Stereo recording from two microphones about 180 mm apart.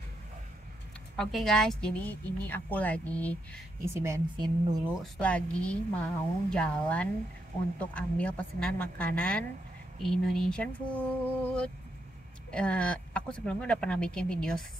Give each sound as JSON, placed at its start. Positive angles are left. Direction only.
{"t": 1.1, "sound": "speech", "side_deg": 0}
{"t": 3.8, "sound": "speech", "side_deg": -15}
{"t": 5.0, "sound": "speech", "side_deg": 5}